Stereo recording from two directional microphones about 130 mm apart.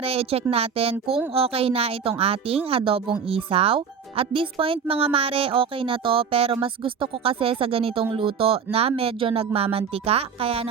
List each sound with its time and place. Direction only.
0.0 s a woman's voice: 50° right (ahead or behind)